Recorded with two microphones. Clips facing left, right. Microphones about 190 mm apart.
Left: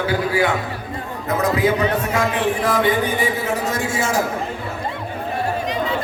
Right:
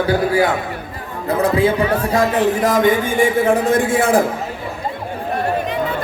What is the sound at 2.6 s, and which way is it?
A man's voice, 45° right (ahead or behind).